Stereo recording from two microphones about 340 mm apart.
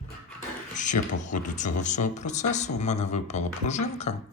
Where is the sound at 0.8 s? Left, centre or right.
Left.